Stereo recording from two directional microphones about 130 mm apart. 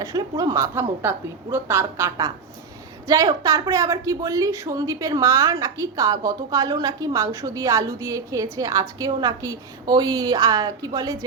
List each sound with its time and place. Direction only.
0.0 s a woman's voice: 25° right (ahead or behind)